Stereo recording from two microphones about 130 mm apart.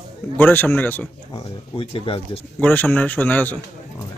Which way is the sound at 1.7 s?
45° left (ahead or behind).